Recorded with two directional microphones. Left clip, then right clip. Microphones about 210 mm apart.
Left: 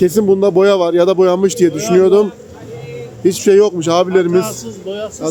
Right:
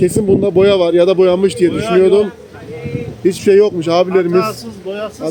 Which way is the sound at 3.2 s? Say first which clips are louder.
Even; centre (ahead or behind).